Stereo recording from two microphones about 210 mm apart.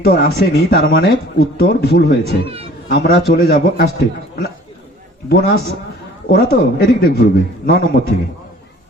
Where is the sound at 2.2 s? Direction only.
25° right (ahead or behind).